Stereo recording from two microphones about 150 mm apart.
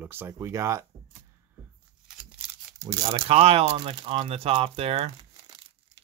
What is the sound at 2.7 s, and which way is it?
Speech, 30° right (ahead or behind).